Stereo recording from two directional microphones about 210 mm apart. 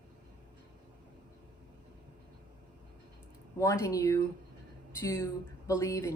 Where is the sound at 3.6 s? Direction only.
15° left (ahead or behind).